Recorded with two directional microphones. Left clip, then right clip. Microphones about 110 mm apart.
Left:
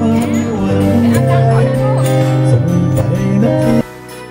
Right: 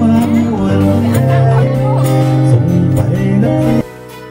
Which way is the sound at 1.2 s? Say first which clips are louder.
Left 1 dB; 20° left (ahead or behind).